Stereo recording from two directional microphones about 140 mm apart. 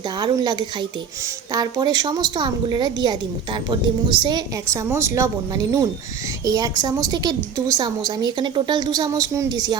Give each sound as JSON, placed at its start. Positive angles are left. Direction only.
{"t": 0.2, "sound": "a woman's voice", "side_deg": -30}
{"t": 6.4, "sound": "a woman's voice", "side_deg": -25}